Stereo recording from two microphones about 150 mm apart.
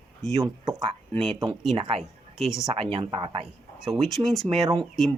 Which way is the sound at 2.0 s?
Centre (ahead or behind).